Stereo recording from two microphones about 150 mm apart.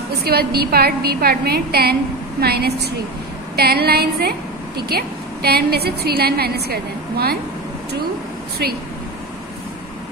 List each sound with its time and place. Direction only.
0.2 s a woman's voice: 90° right